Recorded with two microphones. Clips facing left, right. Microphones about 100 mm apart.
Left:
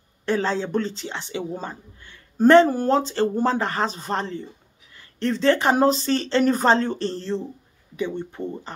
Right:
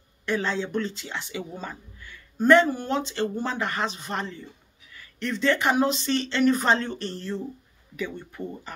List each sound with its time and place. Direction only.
0.2 s speech: 35° left (ahead or behind)